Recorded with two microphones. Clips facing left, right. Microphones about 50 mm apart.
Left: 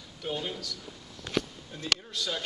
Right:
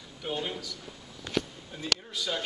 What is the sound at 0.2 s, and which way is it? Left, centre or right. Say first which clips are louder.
Speech: right 1 dB; centre.